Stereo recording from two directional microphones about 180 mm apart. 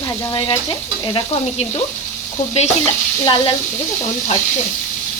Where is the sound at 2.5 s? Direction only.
35° left (ahead or behind).